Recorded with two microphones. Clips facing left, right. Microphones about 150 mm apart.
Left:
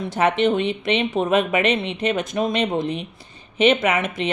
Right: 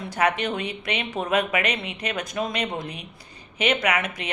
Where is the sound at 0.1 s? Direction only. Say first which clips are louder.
Left 5 dB; 25° left (ahead or behind).